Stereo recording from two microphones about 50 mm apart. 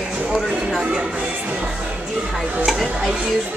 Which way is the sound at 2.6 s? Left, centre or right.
Centre.